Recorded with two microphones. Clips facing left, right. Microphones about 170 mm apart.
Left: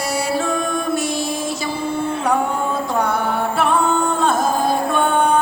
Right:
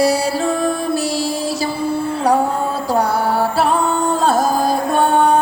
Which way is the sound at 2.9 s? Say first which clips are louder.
Right 6 dB; 35° right (ahead or behind).